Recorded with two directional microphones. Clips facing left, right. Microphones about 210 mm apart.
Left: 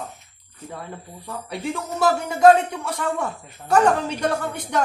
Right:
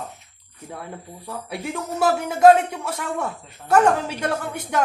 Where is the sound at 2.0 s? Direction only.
5° right (ahead or behind).